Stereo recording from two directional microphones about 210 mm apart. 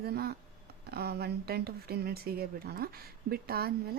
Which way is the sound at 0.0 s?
50° right (ahead or behind).